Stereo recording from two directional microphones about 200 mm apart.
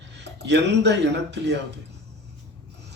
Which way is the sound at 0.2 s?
60° right (ahead or behind).